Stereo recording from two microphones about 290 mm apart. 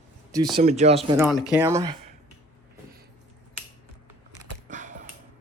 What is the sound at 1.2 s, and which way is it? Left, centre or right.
Speech, centre.